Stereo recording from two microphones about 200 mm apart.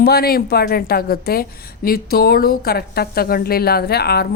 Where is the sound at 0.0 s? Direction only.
50° left (ahead or behind).